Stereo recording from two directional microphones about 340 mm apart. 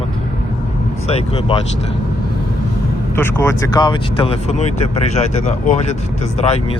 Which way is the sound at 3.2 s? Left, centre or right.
Centre.